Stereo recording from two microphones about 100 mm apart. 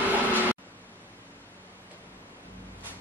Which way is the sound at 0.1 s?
15° right (ahead or behind).